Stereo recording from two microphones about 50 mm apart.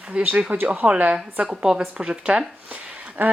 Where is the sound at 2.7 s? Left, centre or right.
Right.